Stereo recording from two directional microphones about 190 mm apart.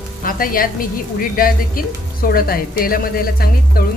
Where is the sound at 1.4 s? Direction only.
50° left (ahead or behind).